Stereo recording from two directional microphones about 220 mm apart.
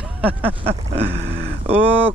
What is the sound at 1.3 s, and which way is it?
Vehicle, 25° right (ahead or behind).